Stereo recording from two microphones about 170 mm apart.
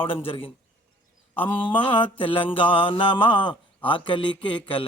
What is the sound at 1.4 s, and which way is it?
Mantra, 30° left (ahead or behind).